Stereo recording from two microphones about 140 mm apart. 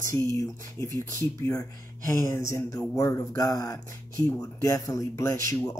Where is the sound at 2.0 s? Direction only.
20° left (ahead or behind).